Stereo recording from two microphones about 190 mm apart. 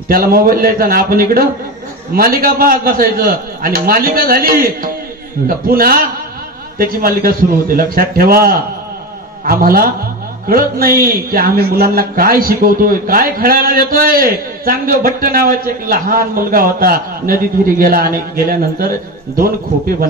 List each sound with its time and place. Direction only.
0.1 s a man's voice: 50° right (ahead or behind)